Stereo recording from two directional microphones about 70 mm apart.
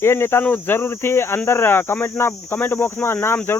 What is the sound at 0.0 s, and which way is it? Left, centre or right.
Speech, left.